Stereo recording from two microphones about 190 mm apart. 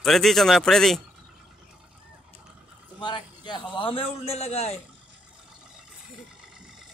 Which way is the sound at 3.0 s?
25° left (ahead or behind).